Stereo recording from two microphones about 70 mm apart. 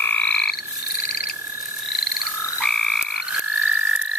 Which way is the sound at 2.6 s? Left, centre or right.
Centre.